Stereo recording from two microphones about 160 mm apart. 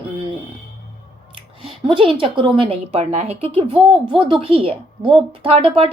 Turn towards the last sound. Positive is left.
turn(degrees=-35)  # may be behind; listen again after turning